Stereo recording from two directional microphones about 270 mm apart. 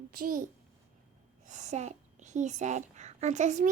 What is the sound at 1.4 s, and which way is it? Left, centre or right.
A woman's voice, right.